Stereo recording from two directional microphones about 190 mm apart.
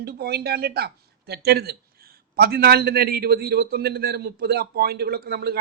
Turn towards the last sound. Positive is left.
turn(degrees=-55)  # may be behind; listen again after turning